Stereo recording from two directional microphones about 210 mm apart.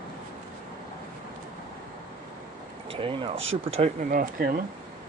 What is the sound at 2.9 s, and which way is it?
Speech, 25° right (ahead or behind).